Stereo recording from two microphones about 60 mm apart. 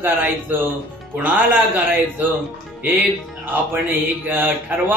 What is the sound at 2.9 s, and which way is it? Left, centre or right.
Speech, right.